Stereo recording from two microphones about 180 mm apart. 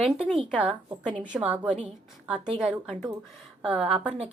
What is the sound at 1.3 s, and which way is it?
A woman's voice, 10° right (ahead or behind).